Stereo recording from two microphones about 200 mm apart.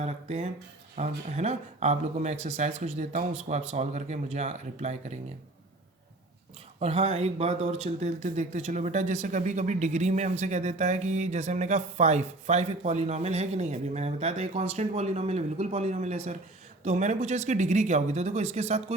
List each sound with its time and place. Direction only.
0.0 s speech: 35° right (ahead or behind)
6.7 s speech: 30° right (ahead or behind)